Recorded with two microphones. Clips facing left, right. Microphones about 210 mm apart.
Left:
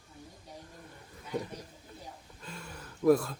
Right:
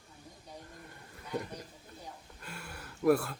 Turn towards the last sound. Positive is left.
turn(degrees=-5)  # may be behind; listen again after turning